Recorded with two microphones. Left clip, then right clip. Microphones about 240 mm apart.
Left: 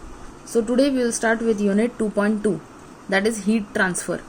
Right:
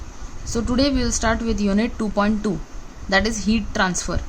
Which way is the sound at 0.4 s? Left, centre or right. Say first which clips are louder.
Left 2 dB; right.